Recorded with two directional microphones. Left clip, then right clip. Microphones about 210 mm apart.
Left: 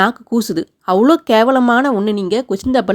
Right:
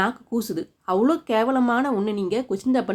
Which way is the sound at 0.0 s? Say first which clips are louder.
Left 9 dB; 40° left (ahead or behind).